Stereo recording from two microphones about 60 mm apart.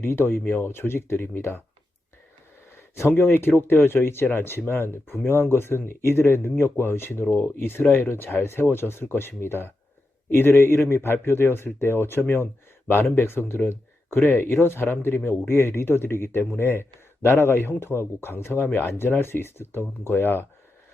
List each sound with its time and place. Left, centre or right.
0.0 s speech: left
2.7 s a sound: left
3.2 s speech: left